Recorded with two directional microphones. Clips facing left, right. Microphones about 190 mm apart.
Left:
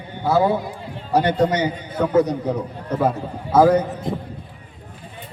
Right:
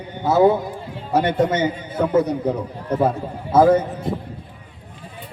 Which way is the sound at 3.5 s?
25° right (ahead or behind).